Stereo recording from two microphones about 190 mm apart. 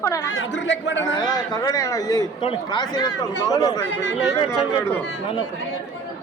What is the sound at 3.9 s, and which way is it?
Speech, 70° left (ahead or behind).